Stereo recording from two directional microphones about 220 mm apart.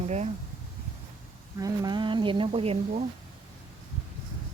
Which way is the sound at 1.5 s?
15° right (ahead or behind).